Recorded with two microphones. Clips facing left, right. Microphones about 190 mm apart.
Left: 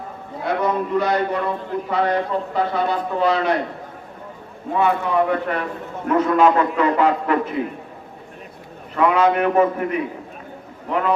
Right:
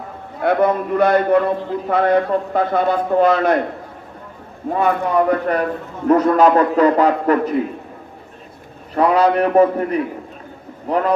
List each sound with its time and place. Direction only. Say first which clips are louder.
0.4 s a man's voice: right 5 dB; 55° right (ahead or behind)
4.7 s a man's voice: right 2 dB; 45° right (ahead or behind)
9.0 s a man's voice: right 3 dB; 35° right (ahead or behind)